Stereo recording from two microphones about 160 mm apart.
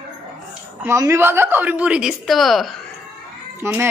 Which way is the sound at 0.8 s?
15° right (ahead or behind).